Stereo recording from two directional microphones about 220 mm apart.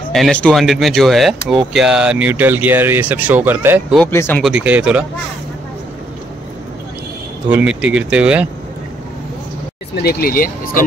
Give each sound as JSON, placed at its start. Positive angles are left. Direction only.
{"t": 0.1, "sound": "speech", "side_deg": 5}
{"t": 4.0, "sound": "speech", "side_deg": 10}
{"t": 4.4, "sound": "speech", "side_deg": -5}
{"t": 7.4, "sound": "speech", "side_deg": -5}
{"t": 10.0, "sound": "speech", "side_deg": 40}